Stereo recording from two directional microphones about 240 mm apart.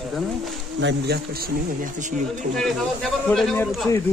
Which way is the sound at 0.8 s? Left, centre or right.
Right.